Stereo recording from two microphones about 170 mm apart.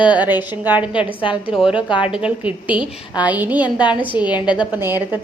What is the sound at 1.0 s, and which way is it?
Speech, 30° left (ahead or behind).